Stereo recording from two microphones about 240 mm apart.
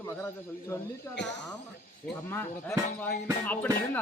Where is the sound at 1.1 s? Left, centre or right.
Left.